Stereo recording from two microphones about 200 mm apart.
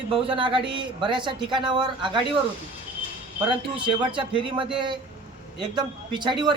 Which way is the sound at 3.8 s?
25° right (ahead or behind).